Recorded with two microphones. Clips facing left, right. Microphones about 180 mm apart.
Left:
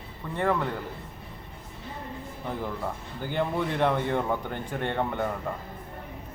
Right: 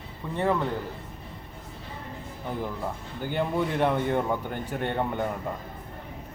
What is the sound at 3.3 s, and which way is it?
Speech, 10° right (ahead or behind).